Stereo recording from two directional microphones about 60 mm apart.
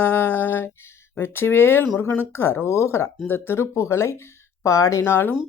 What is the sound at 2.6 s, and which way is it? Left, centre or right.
Carnatic music, left.